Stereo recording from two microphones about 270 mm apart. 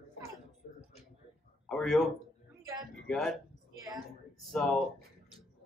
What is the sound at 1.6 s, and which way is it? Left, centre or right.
Speech, centre.